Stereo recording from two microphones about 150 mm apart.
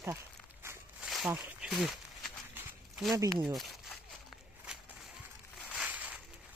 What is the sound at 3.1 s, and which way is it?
Speech, 25° right (ahead or behind).